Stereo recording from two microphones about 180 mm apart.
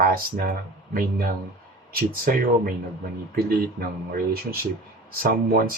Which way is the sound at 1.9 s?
55° right (ahead or behind).